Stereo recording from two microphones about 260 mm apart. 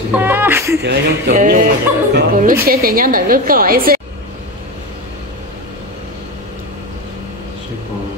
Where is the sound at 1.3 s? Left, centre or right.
Right.